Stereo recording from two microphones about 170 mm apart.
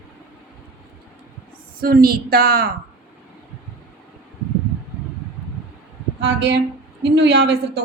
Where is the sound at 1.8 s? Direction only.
60° right (ahead or behind).